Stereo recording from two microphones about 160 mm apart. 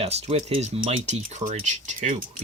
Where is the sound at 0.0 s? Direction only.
40° right (ahead or behind).